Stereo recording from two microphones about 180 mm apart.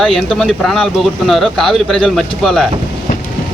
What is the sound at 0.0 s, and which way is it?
Speech, centre (ahead or behind).